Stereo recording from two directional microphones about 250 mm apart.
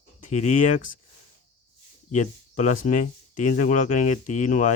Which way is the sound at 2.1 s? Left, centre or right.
Left.